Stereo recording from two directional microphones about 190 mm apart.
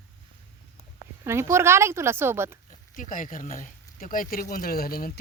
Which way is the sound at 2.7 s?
45° left (ahead or behind).